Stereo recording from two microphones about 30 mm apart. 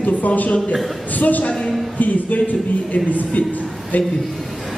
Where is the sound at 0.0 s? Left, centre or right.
Left.